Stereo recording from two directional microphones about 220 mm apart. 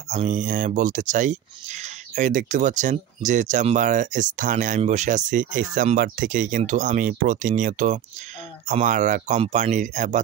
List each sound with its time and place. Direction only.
0.1 s speech: 35° right (ahead or behind)